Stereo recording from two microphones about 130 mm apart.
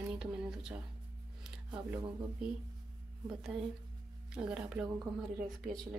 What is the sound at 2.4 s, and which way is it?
Speech, 5° right (ahead or behind).